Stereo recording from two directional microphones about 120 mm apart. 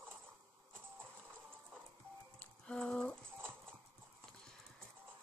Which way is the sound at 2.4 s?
5° left (ahead or behind).